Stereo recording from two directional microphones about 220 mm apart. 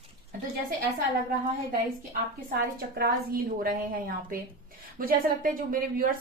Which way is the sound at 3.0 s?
45° right (ahead or behind).